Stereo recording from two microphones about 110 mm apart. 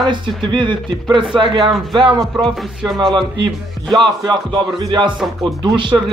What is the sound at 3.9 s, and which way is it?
A man's voice, 45° right (ahead or behind).